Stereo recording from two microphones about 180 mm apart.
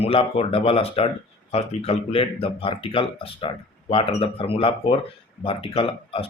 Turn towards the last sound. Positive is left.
turn(degrees=30)  # may be behind; listen again after turning